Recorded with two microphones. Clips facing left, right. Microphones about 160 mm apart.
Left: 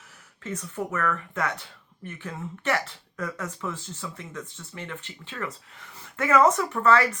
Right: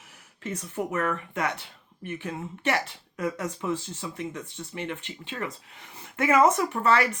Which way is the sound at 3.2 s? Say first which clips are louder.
Right 6 dB; 15° right (ahead or behind).